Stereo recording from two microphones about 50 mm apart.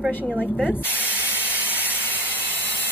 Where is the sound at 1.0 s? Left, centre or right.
Right.